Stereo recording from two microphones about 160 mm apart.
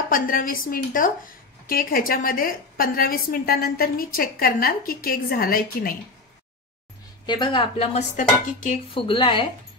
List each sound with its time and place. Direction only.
0.1 s a woman's voice: 60° left (ahead or behind)
7.2 s speech: 30° left (ahead or behind); by 9.0 s 45° left (ahead or behind)
9.0 s speech: 30° left (ahead or behind)